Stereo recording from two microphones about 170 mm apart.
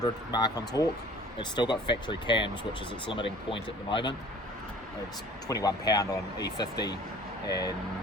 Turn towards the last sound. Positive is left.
turn(degrees=20)  # may be behind; listen again after turning